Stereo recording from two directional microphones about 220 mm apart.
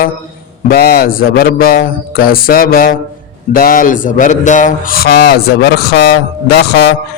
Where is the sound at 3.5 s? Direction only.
40° left (ahead or behind).